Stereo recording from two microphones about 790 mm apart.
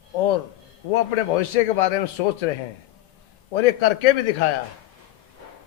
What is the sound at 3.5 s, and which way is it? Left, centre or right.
Speech, left.